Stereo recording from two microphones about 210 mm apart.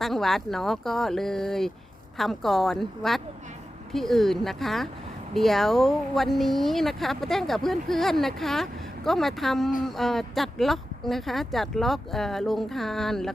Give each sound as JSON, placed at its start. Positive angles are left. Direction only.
{"t": 0.0, "sound": "speech", "side_deg": 0}